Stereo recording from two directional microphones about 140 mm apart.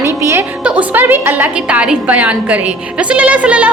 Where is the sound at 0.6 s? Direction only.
10° right (ahead or behind).